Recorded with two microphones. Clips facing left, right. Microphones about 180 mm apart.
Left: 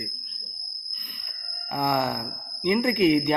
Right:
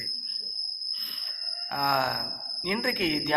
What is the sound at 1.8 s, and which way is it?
A man's voice, 15° left (ahead or behind).